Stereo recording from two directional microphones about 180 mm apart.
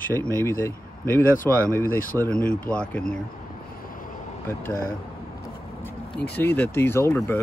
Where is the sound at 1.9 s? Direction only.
50° left (ahead or behind).